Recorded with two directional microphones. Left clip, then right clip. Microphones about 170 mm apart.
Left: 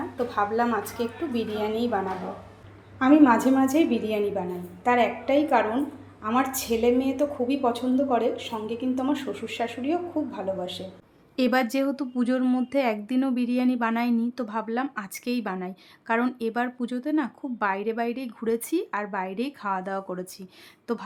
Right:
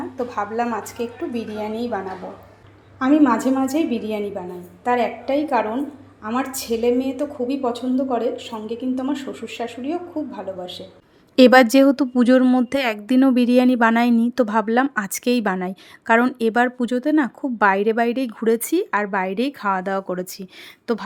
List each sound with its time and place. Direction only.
0.3 s a woman's voice: 10° right (ahead or behind)
3.0 s a woman's voice: 5° right (ahead or behind)
11.3 s a woman's voice: 45° right (ahead or behind); by 21.0 s 25° right (ahead or behind)